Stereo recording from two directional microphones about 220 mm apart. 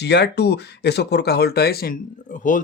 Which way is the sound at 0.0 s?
50° left (ahead or behind).